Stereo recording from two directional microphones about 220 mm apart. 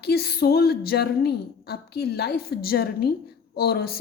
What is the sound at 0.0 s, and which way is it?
Speech, 45° left (ahead or behind).